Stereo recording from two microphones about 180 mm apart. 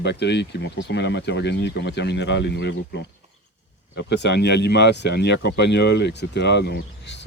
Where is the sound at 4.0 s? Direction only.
70° left (ahead or behind).